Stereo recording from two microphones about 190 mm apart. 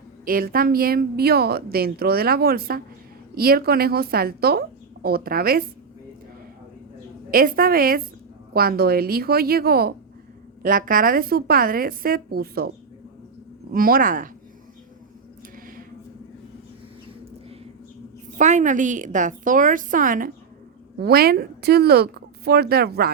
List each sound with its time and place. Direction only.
0.3 s a woman's voice: 50° right (ahead or behind)
7.3 s a woman's voice: 50° right (ahead or behind)
13.7 s a woman's voice: 50° right (ahead or behind)
18.3 s a woman's voice: 40° right (ahead or behind); by 23.1 s 55° right (ahead or behind)